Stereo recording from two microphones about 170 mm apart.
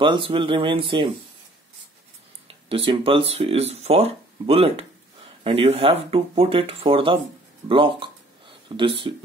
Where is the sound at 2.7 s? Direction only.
35° right (ahead or behind).